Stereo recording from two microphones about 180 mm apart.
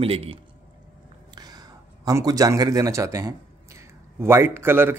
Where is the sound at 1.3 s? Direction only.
20° right (ahead or behind).